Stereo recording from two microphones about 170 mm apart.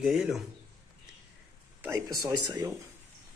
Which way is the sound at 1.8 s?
20° right (ahead or behind).